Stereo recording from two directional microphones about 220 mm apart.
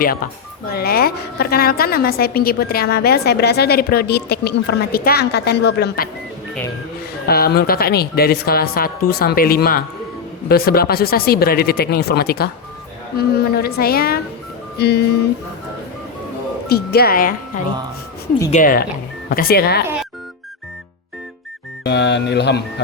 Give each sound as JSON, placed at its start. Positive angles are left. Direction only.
{"t": 0.7, "sound": "a woman's voice", "side_deg": 45}
{"t": 7.3, "sound": "a woman's voice", "side_deg": 45}
{"t": 16.6, "sound": "a woman's voice", "side_deg": 45}
{"t": 21.8, "sound": "a woman's voice", "side_deg": 50}